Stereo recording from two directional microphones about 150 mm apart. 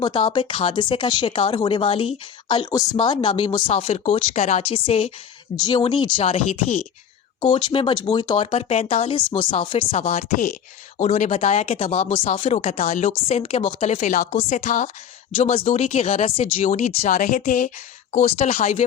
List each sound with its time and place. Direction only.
0.0 s speech: 30° left (ahead or behind)
5.5 s speech: 25° left (ahead or behind); by 14.8 s 55° left (ahead or behind)
15.4 s speech: 40° left (ahead or behind); by 17.7 s 65° left (ahead or behind)
18.3 s speech: 45° left (ahead or behind)